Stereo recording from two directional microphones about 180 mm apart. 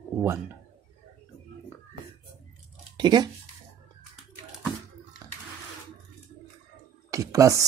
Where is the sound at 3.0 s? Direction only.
25° right (ahead or behind).